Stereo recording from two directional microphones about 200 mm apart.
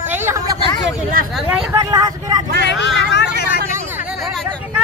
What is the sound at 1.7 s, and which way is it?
Speech, 20° right (ahead or behind).